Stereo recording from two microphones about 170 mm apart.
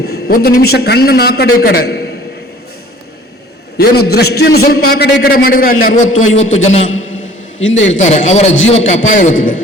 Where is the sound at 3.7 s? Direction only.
65° left (ahead or behind); by 6.8 s 40° left (ahead or behind).